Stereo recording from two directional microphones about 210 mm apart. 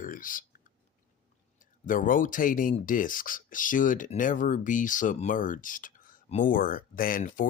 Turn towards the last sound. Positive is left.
turn(degrees=40)  # may be behind; listen again after turning